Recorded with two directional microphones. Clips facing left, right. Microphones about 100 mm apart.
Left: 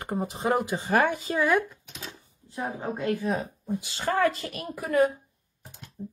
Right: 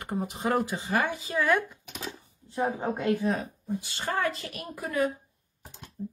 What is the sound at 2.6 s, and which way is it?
Speech, 20° right (ahead or behind).